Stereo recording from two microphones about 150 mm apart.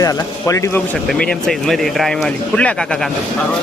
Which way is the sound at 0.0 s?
20° left (ahead or behind).